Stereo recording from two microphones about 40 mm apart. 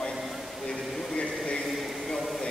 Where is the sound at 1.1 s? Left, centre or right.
Left.